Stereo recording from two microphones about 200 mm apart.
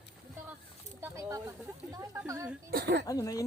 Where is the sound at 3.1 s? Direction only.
15° left (ahead or behind).